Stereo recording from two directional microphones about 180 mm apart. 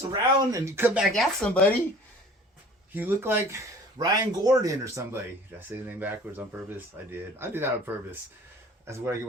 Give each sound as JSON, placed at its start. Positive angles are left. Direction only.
{"t": 0.1, "sound": "speech", "side_deg": -15}
{"t": 1.1, "sound": "speech", "side_deg": 5}
{"t": 2.9, "sound": "speech", "side_deg": -10}